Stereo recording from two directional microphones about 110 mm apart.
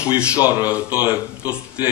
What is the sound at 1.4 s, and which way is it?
Speech, 15° right (ahead or behind).